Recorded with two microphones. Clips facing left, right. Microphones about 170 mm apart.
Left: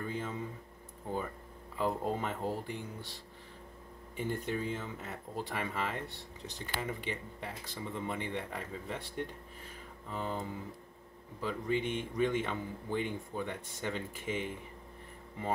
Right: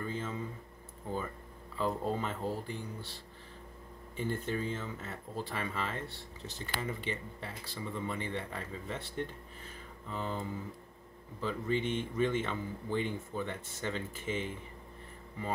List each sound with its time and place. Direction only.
0.1 s a sound: 15° left (ahead or behind)
1.8 s speech: 15° left (ahead or behind)
4.2 s speech: 15° left (ahead or behind)
11.4 s speech: 10° left (ahead or behind)